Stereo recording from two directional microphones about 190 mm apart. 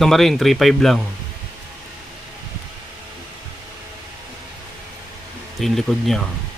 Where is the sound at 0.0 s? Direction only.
Centre (ahead or behind).